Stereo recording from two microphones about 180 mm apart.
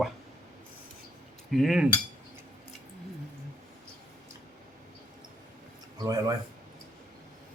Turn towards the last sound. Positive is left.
turn(degrees=-20)  # may be behind; listen again after turning